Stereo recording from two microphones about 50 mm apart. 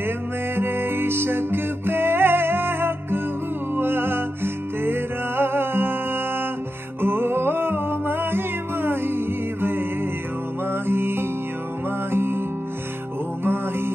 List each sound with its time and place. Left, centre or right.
0.6 s music: right
7.0 s music: right
13.4 s music: right